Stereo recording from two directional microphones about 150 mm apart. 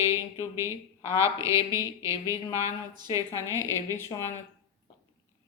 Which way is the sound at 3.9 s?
20° left (ahead or behind).